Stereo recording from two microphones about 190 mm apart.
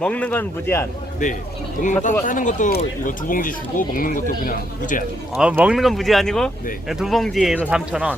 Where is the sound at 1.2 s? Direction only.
40° left (ahead or behind).